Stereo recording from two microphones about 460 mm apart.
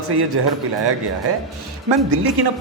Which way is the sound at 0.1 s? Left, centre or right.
Right.